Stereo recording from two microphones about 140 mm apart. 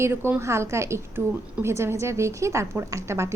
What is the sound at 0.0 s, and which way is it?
A woman's voice, 15° right (ahead or behind).